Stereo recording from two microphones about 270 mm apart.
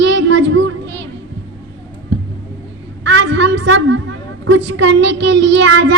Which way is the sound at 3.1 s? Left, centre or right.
Right.